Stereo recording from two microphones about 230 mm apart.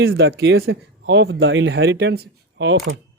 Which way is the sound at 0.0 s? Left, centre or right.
Right.